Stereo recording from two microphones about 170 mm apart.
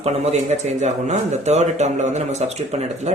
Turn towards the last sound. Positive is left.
turn(degrees=-40)  # may be behind; listen again after turning